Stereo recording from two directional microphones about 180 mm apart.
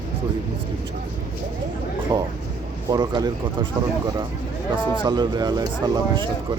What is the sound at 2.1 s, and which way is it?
Speech, 20° right (ahead or behind).